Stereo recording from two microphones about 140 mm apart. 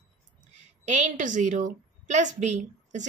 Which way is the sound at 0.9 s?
60° right (ahead or behind).